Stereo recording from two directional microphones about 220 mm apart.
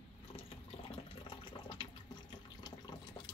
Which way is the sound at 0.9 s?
25° left (ahead or behind).